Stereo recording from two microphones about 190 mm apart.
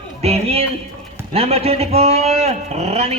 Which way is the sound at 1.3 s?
30° right (ahead or behind).